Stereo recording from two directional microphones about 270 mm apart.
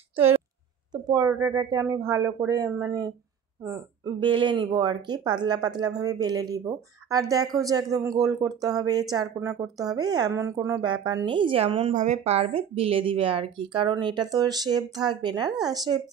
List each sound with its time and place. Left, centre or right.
0.9 s a woman's voice: centre